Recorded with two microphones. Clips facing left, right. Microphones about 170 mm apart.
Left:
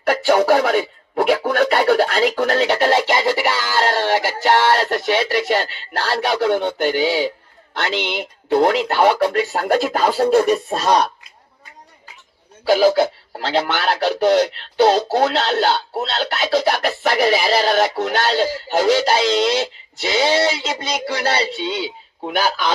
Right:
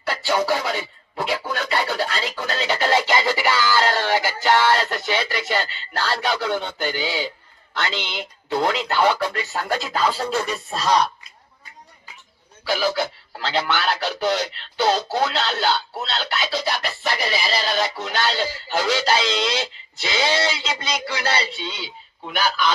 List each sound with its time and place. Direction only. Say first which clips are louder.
0.0 s speech: left 7 dB; 60° left (ahead or behind)
12.6 s speech: left 9 dB; 50° left (ahead or behind)
20.1 s a sound: left 5 dB; 50° left (ahead or behind)
20.9 s speech: left 4 dB; 40° left (ahead or behind)